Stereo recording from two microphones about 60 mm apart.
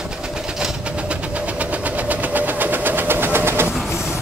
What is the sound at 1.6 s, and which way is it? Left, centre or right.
Train, right.